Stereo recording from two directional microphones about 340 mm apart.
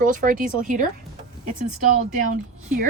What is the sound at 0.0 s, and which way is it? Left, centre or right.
Speech, right.